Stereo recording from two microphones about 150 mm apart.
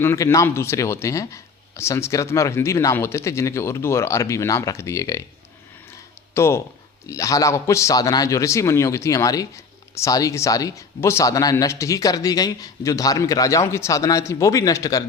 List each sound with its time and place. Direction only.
0.0 s speech: 15° left (ahead or behind)
6.3 s speech: 15° left (ahead or behind)